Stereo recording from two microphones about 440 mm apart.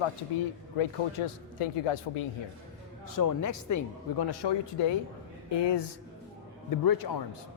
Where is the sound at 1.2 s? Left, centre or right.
Left.